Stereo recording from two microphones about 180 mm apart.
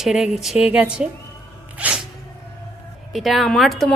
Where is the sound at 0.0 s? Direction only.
Centre (ahead or behind).